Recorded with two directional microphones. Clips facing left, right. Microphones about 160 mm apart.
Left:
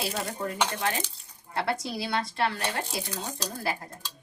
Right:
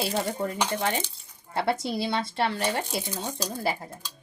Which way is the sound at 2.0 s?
25° right (ahead or behind).